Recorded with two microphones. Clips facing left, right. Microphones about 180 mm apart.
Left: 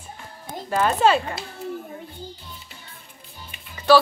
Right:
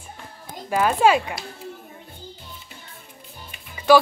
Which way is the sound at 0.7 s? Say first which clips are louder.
Right 1 dB; 10° right (ahead or behind).